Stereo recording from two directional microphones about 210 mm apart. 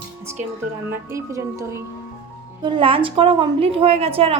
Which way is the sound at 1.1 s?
15° right (ahead or behind).